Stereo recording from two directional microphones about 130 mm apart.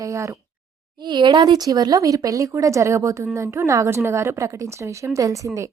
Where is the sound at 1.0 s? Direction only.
35° right (ahead or behind).